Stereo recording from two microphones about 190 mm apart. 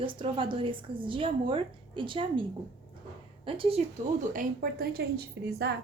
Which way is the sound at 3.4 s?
30° right (ahead or behind).